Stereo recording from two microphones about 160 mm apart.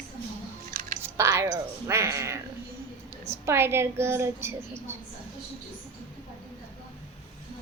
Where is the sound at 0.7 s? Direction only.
60° right (ahead or behind).